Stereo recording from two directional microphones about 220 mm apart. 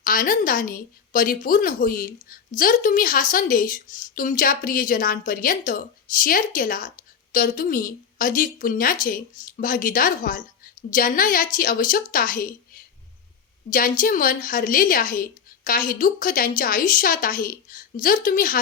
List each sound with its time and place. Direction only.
0.0 s a woman's voice: 40° left (ahead or behind)